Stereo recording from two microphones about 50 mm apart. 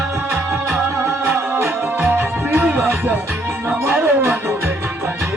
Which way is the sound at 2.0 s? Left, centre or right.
Right.